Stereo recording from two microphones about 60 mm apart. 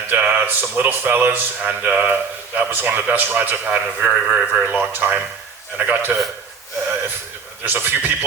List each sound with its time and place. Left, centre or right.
0.1 s a man's voice: right
7.6 s a man's voice: right